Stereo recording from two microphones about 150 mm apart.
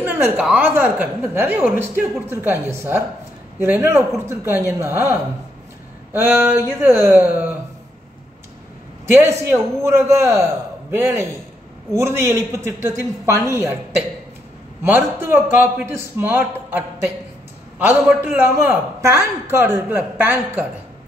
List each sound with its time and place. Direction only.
0.0 s a woman's voice: 10° right (ahead or behind)
6.1 s a woman's voice: 15° right (ahead or behind)
9.0 s a woman's voice: 15° right (ahead or behind)
14.9 s a woman's voice: 15° right (ahead or behind)